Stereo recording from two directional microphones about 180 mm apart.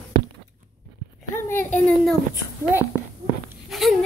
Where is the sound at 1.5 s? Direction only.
10° left (ahead or behind).